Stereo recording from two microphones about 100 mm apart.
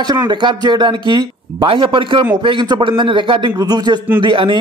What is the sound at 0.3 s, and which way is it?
Speech, 50° right (ahead or behind).